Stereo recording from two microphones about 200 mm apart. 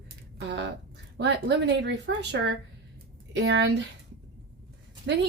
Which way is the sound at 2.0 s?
60° right (ahead or behind).